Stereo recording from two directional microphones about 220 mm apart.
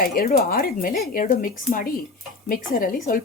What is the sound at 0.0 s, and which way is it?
Speech, 40° left (ahead or behind).